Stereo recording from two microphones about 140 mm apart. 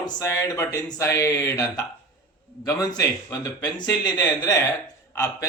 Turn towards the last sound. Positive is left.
turn(degrees=25)  # may be behind; listen again after turning